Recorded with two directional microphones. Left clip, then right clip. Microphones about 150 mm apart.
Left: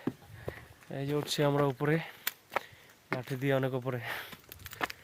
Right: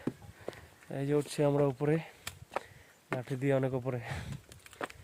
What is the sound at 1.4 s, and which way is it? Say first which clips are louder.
Speech: left 2 dB; 10° right (ahead or behind).